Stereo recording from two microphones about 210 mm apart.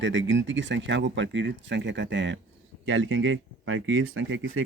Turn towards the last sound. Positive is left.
turn(degrees=-65)  # may be behind; listen again after turning